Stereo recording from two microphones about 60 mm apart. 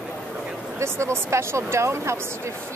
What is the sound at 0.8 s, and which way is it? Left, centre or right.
Speech, right.